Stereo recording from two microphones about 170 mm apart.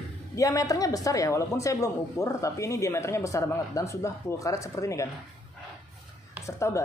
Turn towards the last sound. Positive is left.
turn(degrees=15)  # may be behind; listen again after turning